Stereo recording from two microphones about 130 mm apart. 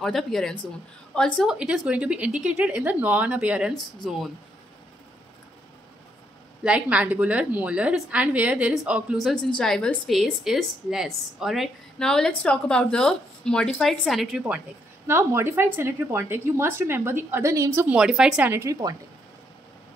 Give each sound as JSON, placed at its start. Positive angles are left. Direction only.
{"t": 0.0, "sound": "a woman's voice", "side_deg": 5}
{"t": 1.4, "sound": "a woman's voice", "side_deg": -5}
{"t": 3.7, "sound": "a woman's voice", "side_deg": 5}
{"t": 6.6, "sound": "a woman's voice", "side_deg": -10}
{"t": 9.6, "sound": "a woman's voice", "side_deg": 10}
{"t": 15.0, "sound": "a woman's voice", "side_deg": -20}
{"t": 17.9, "sound": "a woman's voice", "side_deg": -5}
{"t": 18.5, "sound": "speech", "side_deg": -20}